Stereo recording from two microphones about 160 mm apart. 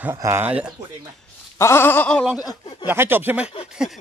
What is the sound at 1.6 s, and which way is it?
Speech, 15° left (ahead or behind).